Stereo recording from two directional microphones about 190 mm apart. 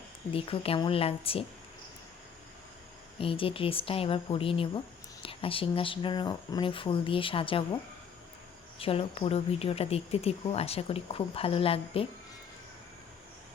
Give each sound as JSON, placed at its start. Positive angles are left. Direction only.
{"t": 0.3, "sound": "speech", "side_deg": 30}
{"t": 3.2, "sound": "speech", "side_deg": 30}
{"t": 8.8, "sound": "speech", "side_deg": 30}